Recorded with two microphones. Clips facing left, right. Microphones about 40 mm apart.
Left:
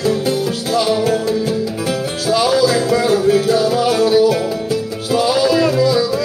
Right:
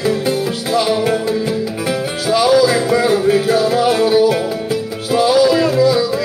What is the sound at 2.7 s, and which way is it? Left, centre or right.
Music, right.